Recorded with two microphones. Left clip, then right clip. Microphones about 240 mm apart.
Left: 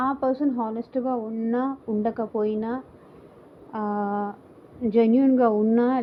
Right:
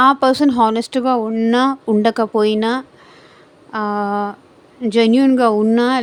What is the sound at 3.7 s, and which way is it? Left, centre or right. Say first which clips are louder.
A woman's voice: right 8 dB; right.